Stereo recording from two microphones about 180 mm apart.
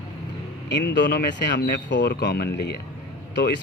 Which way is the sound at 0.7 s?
70° left (ahead or behind).